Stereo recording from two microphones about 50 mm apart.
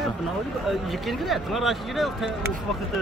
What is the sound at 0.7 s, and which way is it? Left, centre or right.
Speech, centre.